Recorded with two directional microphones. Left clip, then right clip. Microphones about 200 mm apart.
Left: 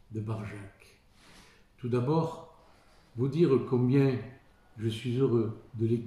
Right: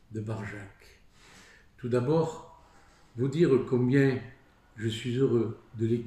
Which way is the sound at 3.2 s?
Centre (ahead or behind).